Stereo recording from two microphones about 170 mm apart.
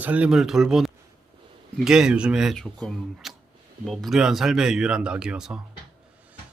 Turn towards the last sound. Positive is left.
turn(degrees=-5)  # may be behind; listen again after turning